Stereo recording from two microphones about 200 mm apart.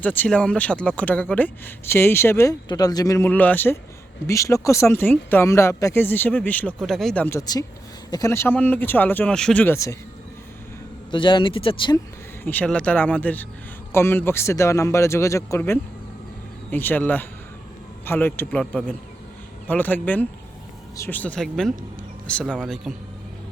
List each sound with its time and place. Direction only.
0.0 s speech: 10° left (ahead or behind)
11.1 s speech: 25° left (ahead or behind)
12.5 s speech: 5° left (ahead or behind)